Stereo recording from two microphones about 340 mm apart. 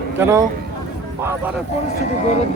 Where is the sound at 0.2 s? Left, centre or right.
Centre.